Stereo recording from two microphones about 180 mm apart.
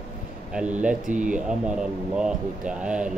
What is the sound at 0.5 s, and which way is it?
Speech, 5° right (ahead or behind).